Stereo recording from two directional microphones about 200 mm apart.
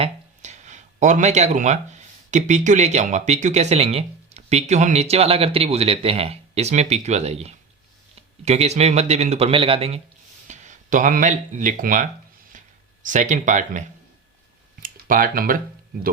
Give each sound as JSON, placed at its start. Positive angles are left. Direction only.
{"t": 0.0, "sound": "speech", "side_deg": -35}
{"t": 12.5, "sound": "a sound", "side_deg": -40}
{"t": 14.8, "sound": "speech", "side_deg": -45}